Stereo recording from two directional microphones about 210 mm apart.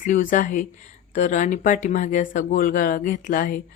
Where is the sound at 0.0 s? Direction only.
40° left (ahead or behind).